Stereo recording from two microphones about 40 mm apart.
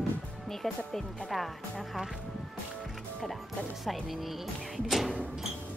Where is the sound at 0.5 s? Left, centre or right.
Centre.